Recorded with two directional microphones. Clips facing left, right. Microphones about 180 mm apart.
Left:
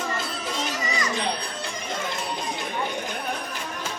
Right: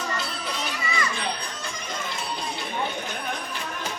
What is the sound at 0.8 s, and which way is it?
Children playing, 40° left (ahead or behind).